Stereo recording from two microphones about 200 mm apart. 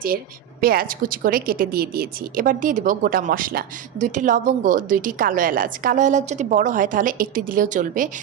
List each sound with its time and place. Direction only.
0.6 s a woman's voice: 45° right (ahead or behind)